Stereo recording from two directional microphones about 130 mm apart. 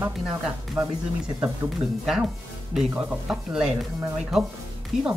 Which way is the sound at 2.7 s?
5° right (ahead or behind).